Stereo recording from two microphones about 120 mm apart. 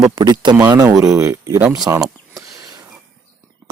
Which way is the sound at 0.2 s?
35° right (ahead or behind).